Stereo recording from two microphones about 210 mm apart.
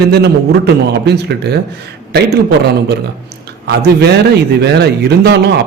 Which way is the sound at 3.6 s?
50° right (ahead or behind).